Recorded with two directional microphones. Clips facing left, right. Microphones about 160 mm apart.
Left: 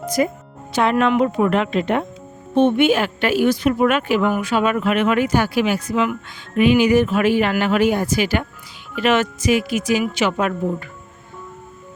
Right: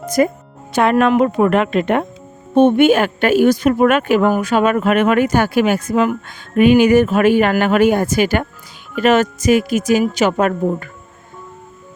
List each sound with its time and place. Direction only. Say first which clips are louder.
0.2 s a woman's voice: right 5 dB; 50° right (ahead or behind)